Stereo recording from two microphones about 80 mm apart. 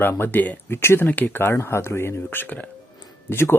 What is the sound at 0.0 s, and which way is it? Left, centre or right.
Speech, left.